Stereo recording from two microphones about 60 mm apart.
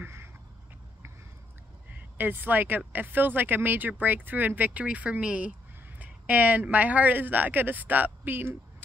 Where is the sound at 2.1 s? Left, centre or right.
Right.